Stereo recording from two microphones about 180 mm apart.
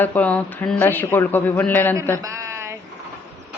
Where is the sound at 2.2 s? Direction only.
15° right (ahead or behind).